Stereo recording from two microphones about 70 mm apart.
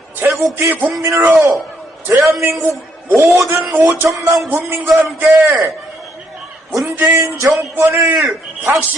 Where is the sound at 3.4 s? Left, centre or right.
Centre.